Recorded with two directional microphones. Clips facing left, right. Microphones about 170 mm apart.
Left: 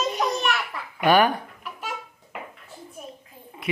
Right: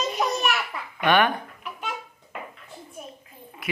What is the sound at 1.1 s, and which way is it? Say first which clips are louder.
Speech: left 2 dB; 35° left (ahead or behind).